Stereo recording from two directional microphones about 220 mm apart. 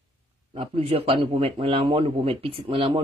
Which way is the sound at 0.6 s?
25° right (ahead or behind).